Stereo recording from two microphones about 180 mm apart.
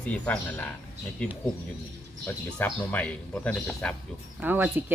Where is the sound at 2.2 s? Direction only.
10° left (ahead or behind).